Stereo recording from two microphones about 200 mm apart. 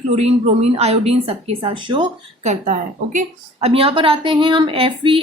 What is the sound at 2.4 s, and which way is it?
A woman's voice, 35° right (ahead or behind).